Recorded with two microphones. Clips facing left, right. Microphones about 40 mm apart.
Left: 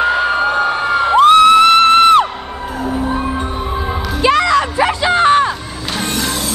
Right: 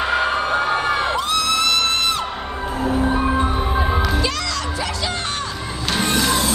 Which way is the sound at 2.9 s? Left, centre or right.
Centre.